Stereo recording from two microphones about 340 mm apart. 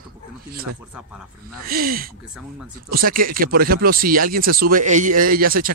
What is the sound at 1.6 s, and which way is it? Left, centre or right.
Speech, right.